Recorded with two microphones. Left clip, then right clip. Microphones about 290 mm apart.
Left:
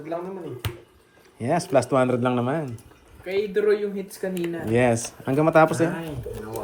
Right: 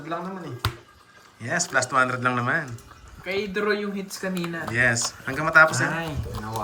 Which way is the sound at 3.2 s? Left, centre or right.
Right.